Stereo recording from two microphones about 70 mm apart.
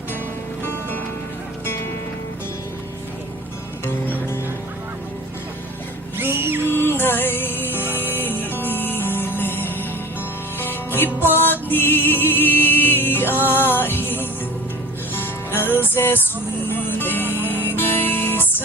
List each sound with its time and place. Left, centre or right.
0.6 s music: left
6.1 s a sound: right
6.7 s music: left